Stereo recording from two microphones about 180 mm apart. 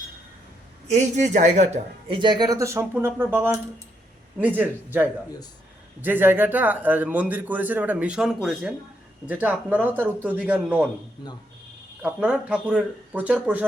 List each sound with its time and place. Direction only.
0.9 s speech: 40° right (ahead or behind)
2.1 s a man's voice: 25° right (ahead or behind); by 10.8 s 10° right (ahead or behind)
12.0 s a man's voice: 10° right (ahead or behind)